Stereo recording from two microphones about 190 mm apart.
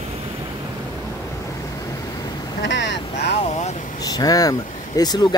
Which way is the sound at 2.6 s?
70° left (ahead or behind).